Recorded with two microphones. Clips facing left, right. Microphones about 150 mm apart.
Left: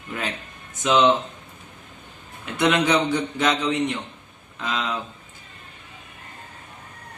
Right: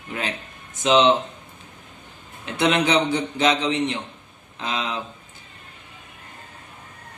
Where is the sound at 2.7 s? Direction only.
25° right (ahead or behind).